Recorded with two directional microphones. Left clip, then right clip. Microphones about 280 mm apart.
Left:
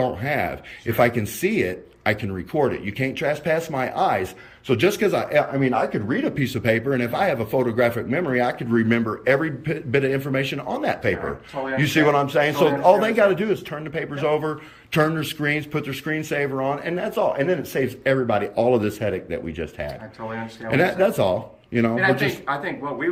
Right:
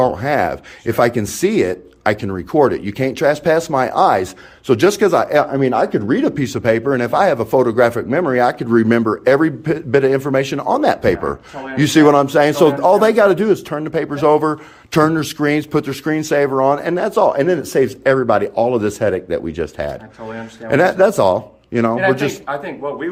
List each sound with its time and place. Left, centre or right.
0.0 s speech: centre